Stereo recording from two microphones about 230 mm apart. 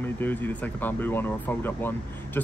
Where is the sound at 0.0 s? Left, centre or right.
Centre.